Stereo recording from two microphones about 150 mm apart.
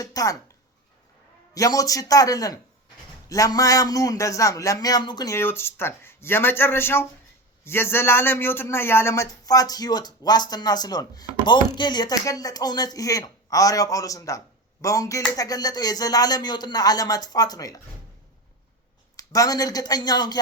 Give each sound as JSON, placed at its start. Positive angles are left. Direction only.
{"t": 0.0, "sound": "a man's voice", "side_deg": 25}
{"t": 1.5, "sound": "a man's voice", "side_deg": 25}
{"t": 19.1, "sound": "a man's voice", "side_deg": 25}